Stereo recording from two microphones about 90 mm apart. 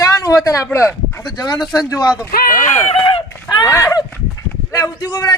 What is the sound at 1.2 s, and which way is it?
A man's voice, 55° left (ahead or behind).